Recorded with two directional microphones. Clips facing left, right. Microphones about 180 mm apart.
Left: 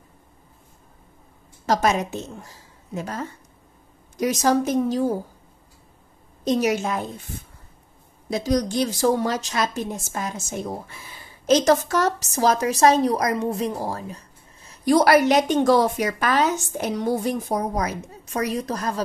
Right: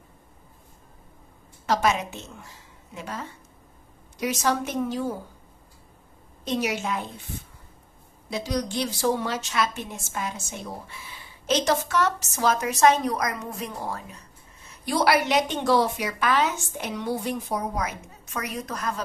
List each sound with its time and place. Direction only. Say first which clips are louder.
1.7 s a woman's voice: left 3 dB; 40° left (ahead or behind)
6.4 s a woman's voice: left 6 dB; 40° left (ahead or behind)
8.3 s a woman's voice: left 6 dB; 45° left (ahead or behind)